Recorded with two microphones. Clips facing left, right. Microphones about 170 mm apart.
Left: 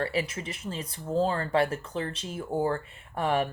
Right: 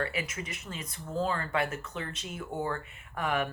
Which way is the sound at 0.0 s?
30° left (ahead or behind).